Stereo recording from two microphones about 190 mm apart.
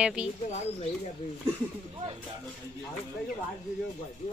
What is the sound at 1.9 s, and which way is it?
Speech, 25° right (ahead or behind).